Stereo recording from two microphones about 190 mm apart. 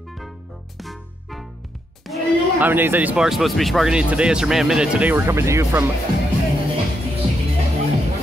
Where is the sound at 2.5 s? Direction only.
10° right (ahead or behind).